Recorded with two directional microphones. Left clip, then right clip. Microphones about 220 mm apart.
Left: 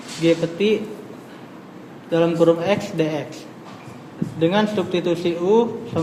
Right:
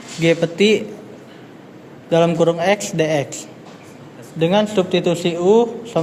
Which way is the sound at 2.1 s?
50° right (ahead or behind).